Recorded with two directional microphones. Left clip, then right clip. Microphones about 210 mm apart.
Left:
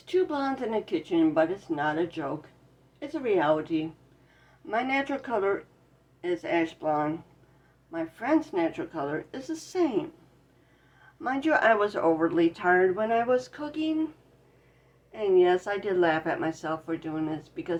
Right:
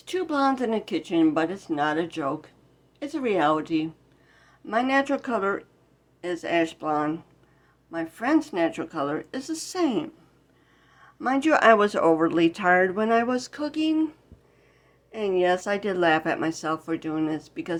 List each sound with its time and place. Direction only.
0.0 s speech: 50° right (ahead or behind)
11.2 s speech: 55° right (ahead or behind)
15.1 s speech: 60° right (ahead or behind)